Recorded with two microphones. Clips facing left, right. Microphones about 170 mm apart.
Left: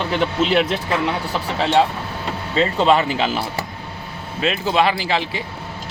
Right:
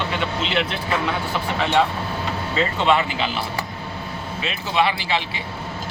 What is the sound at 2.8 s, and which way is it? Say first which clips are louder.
Speech: left 4 dB; 35° left (ahead or behind).